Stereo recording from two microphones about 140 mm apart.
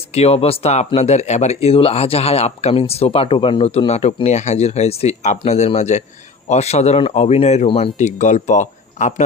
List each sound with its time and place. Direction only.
0.1 s speech: 50° left (ahead or behind)
7.9 s speech: 55° left (ahead or behind)